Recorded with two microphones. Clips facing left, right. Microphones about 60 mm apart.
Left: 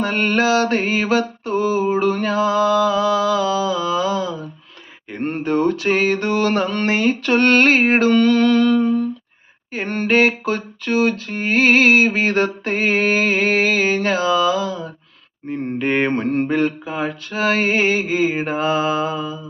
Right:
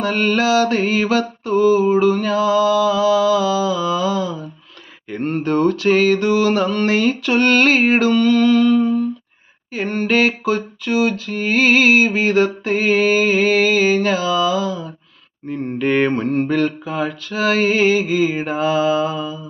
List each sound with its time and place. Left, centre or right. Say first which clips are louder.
0.0 s mantra: right 1 dB; left
5.4 s mantra: right 1 dB; centre; by 6.8 s left
6.8 s mantra: even; left
7.2 s mantra: even; left
8.1 s music: even; left
9.7 s a sound: even; left
15.4 s mantra: right 1 dB; left